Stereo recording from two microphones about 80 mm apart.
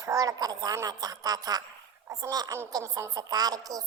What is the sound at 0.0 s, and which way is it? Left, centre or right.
A child's voice, right.